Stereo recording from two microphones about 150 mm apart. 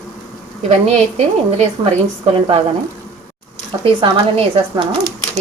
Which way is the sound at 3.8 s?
35° right (ahead or behind).